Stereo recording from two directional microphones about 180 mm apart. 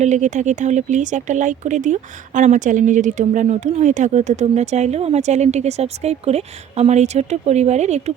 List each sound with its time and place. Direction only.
0.0 s speech: 40° right (ahead or behind)